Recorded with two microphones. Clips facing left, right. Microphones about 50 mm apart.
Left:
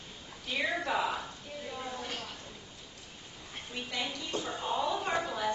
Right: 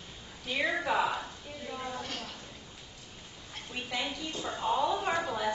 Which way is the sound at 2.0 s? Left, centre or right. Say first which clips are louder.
Even; centre.